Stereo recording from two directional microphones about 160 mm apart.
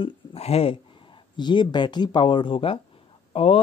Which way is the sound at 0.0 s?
40° left (ahead or behind).